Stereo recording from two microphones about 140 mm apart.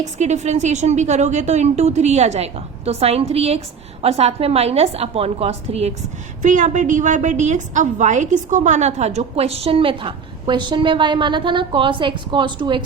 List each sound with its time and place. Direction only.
0.2 s a woman's voice: 55° right (ahead or behind)
6.4 s a woman's voice: 60° right (ahead or behind); by 12.8 s 35° right (ahead or behind)